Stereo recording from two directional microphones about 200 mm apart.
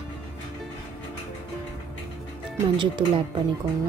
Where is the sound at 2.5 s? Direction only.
25° right (ahead or behind).